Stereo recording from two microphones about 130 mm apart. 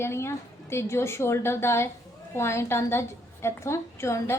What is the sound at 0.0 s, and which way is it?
A woman's voice, 20° left (ahead or behind).